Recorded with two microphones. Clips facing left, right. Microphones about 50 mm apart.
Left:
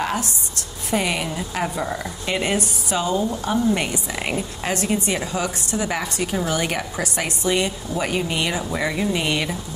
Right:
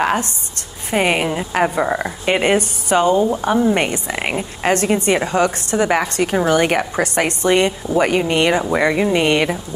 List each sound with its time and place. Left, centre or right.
0.0 s speech: right